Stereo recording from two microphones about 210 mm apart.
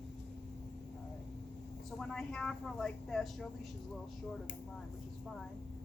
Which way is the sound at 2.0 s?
5° left (ahead or behind).